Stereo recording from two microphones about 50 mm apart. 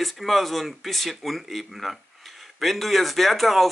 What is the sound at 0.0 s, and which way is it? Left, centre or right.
Speech, centre.